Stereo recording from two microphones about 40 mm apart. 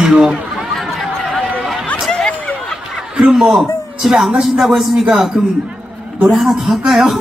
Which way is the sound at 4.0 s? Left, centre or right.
Centre.